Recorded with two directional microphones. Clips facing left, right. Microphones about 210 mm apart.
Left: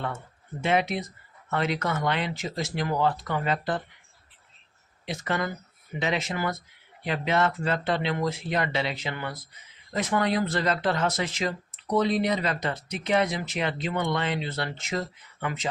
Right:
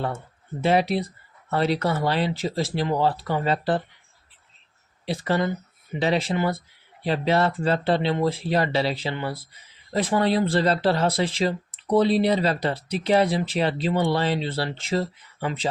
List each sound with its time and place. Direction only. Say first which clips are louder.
0.6 s speech: right 4 dB; 35° right (ahead or behind)
5.0 s speech: right 5 dB; 30° right (ahead or behind)